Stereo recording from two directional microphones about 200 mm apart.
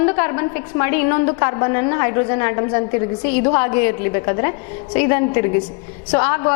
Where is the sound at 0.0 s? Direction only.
15° left (ahead or behind).